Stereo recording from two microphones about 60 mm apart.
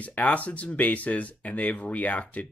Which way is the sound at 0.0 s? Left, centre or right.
Left.